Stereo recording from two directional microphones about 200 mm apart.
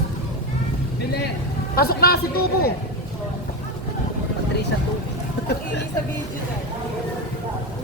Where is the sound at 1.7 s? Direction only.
50° left (ahead or behind).